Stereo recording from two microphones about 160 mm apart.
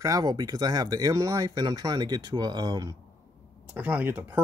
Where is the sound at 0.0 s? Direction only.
20° right (ahead or behind).